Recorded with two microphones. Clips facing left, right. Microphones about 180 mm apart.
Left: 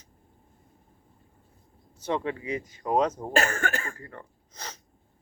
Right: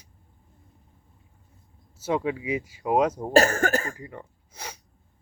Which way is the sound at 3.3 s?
40° right (ahead or behind).